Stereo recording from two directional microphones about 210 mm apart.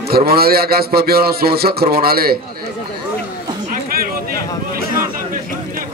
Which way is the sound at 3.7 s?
45° right (ahead or behind).